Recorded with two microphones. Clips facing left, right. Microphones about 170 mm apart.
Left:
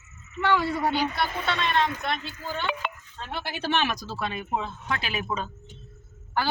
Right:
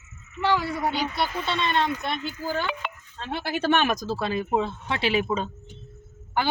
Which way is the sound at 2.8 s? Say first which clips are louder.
Left 1 dB; 50° left (ahead or behind).